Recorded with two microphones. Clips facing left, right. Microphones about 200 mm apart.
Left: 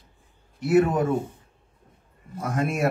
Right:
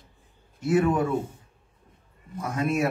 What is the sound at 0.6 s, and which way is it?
Speech, 40° left (ahead or behind).